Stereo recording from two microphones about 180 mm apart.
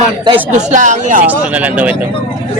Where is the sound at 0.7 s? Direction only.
45° right (ahead or behind).